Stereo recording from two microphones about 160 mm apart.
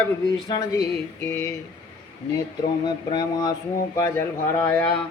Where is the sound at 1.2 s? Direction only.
15° left (ahead or behind).